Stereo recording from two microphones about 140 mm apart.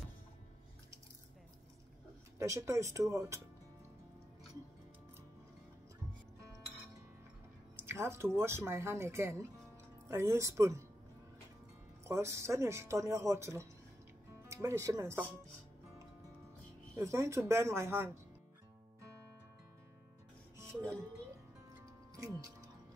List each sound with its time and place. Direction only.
2.3 s speech: 20° right (ahead or behind)
7.7 s speech: 20° right (ahead or behind)
12.0 s speech: 20° right (ahead or behind)
16.9 s speech: 20° right (ahead or behind)
22.1 s speech: 25° right (ahead or behind)